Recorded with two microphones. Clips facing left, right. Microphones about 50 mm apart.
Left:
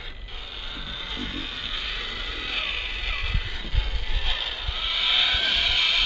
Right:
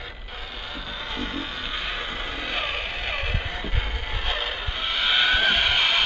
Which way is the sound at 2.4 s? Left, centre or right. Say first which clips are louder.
Right 1 dB; centre.